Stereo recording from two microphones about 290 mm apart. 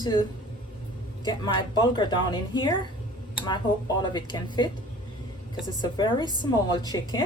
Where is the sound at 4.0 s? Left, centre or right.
Centre.